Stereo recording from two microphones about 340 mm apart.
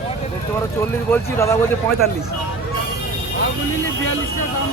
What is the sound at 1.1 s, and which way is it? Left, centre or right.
Speech, centre.